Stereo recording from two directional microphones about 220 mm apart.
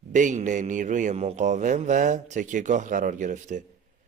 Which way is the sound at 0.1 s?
35° right (ahead or behind).